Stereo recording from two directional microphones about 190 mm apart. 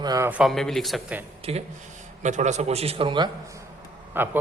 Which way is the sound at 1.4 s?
30° right (ahead or behind).